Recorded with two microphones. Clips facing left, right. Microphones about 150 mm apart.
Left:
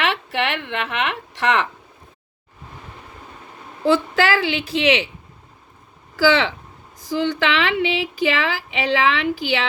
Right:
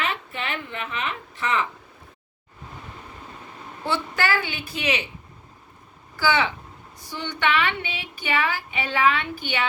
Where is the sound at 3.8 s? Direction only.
90° left.